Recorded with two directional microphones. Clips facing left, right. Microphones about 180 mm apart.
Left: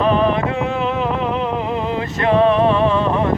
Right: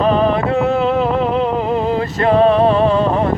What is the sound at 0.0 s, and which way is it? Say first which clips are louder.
Music: right 2 dB; 35° right (ahead or behind).